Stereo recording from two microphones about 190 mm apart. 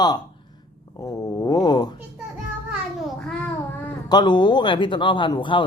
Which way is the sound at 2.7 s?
Centre (ahead or behind).